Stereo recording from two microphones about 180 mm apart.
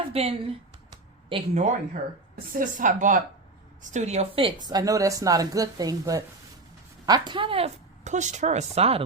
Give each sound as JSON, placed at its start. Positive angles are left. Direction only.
{"t": 0.1, "sound": "a sound", "side_deg": -35}
{"t": 2.5, "sound": "a woman's voice", "side_deg": -50}
{"t": 4.6, "sound": "a woman's voice", "side_deg": -20}